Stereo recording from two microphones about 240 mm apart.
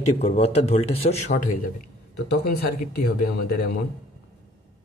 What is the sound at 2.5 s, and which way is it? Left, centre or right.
Speech, left.